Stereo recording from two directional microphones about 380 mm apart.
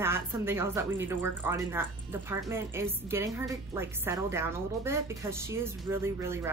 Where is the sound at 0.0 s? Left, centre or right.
Centre.